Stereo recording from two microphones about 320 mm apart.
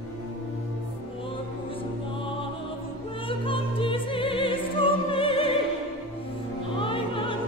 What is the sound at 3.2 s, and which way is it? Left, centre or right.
Opera, centre.